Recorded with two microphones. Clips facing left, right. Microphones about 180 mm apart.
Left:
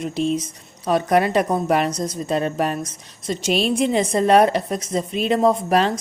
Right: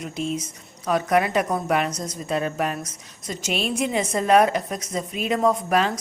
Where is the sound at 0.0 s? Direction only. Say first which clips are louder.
Left 6 dB; 30° left (ahead or behind).